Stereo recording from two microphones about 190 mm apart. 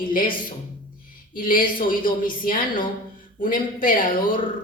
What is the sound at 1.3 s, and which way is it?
A man's voice, 45° left (ahead or behind).